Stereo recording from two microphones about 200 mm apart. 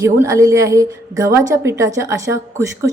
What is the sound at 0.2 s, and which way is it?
A woman's voice, 15° right (ahead or behind).